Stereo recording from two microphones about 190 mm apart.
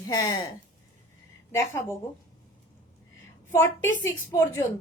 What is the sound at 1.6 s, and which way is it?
Speech, 15° left (ahead or behind).